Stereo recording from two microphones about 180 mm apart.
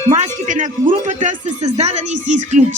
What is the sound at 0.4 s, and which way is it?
Speech, 45° right (ahead or behind).